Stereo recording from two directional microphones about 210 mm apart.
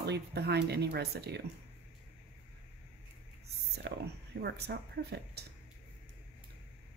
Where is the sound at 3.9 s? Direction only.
55° right (ahead or behind).